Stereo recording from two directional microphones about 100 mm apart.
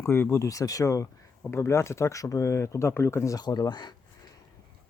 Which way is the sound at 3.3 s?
45° left (ahead or behind).